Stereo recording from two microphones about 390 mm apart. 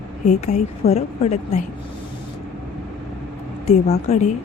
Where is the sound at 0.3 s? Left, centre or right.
Centre.